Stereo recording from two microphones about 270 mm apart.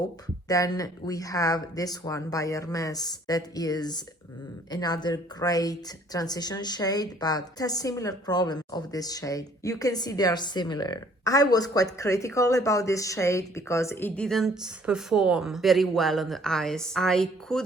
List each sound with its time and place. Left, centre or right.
0.4 s a woman's voice: centre